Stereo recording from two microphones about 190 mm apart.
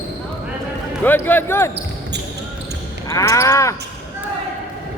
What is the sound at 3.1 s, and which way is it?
Speech, 15° left (ahead or behind).